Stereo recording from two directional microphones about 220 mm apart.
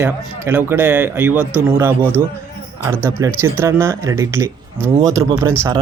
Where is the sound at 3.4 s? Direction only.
10° right (ahead or behind).